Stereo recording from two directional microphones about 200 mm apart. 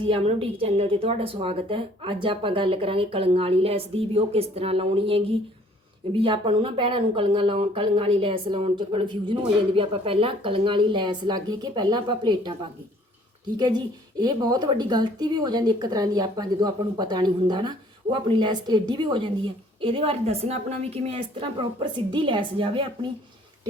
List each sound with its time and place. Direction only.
0.0 s speech: 30° right (ahead or behind)
13.6 s a woman's voice: 20° right (ahead or behind)